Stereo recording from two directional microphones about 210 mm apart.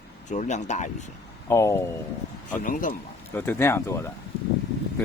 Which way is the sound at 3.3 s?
10° left (ahead or behind).